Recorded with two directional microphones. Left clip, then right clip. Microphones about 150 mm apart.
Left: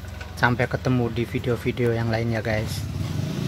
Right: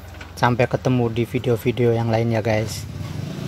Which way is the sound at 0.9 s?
20° right (ahead or behind).